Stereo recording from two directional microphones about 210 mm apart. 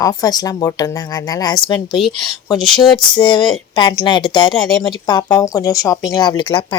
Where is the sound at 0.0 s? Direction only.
20° left (ahead or behind).